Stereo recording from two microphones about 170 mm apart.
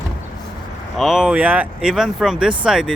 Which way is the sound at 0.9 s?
Centre (ahead or behind).